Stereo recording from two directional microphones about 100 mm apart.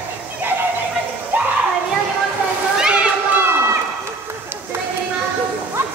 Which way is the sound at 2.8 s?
10° right (ahead or behind).